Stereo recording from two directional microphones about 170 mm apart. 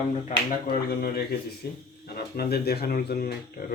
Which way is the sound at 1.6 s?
75° left (ahead or behind).